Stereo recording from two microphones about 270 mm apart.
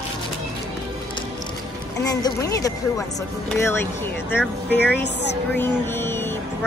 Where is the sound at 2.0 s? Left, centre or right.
Centre.